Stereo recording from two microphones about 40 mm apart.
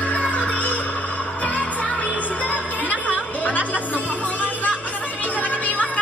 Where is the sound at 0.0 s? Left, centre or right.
Left.